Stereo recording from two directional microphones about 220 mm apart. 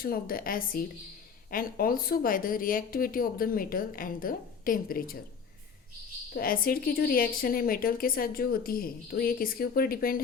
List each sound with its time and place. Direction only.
0.0 s speech: 40° left (ahead or behind)
6.3 s speech: 40° left (ahead or behind)